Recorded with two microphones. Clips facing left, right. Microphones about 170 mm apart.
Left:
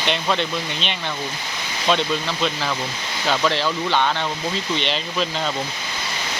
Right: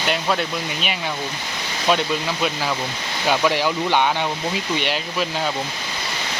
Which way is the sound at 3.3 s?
10° right (ahead or behind).